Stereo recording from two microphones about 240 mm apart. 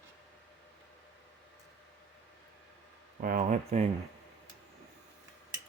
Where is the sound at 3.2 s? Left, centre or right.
Right.